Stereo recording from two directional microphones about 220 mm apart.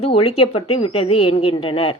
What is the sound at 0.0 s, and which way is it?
A woman's voice, 25° left (ahead or behind).